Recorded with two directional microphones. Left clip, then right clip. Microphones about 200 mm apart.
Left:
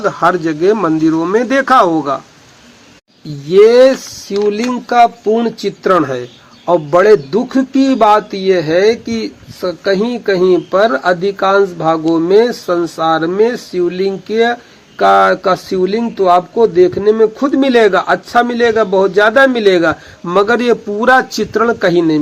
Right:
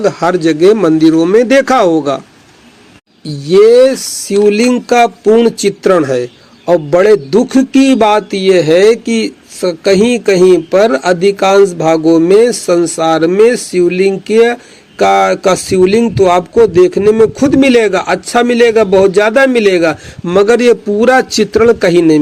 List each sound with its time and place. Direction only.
0.0 s speech: 30° right (ahead or behind)
3.5 s speech: 35° right (ahead or behind)